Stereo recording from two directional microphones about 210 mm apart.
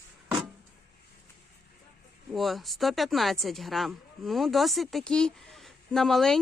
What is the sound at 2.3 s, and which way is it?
Speech, centre (ahead or behind).